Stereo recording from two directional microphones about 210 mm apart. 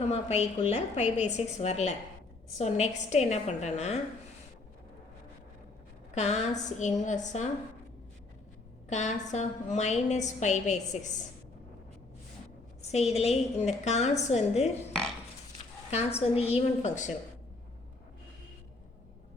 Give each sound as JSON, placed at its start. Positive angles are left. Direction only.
{"t": 0.1, "sound": "a woman's voice", "side_deg": 30}
{"t": 6.1, "sound": "a woman's voice", "side_deg": 30}
{"t": 8.9, "sound": "a woman's voice", "side_deg": 35}
{"t": 12.8, "sound": "a woman's voice", "side_deg": 30}
{"t": 15.9, "sound": "a woman's voice", "side_deg": 30}